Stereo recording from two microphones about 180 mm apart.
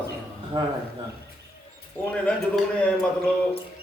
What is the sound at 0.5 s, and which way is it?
Speech, 25° right (ahead or behind).